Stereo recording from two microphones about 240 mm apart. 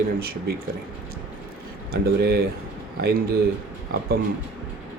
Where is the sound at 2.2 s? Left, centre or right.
Right.